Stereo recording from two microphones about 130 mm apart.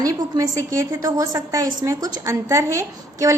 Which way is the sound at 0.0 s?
25° right (ahead or behind).